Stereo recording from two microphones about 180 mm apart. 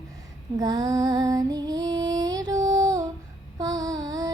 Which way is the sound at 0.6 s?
20° right (ahead or behind).